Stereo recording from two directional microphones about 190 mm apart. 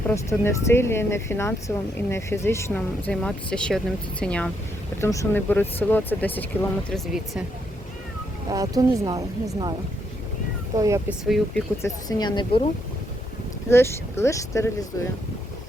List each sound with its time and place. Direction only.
0.1 s speech: 15° left (ahead or behind)
8.5 s speech: 20° right (ahead or behind)
10.8 s speech: 15° right (ahead or behind)
11.3 s speech: centre (ahead or behind)
11.8 s speech: 20° left (ahead or behind)
13.7 s speech: 15° left (ahead or behind)